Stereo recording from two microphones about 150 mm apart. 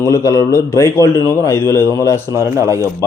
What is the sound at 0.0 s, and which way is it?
A man's voice, 20° left (ahead or behind).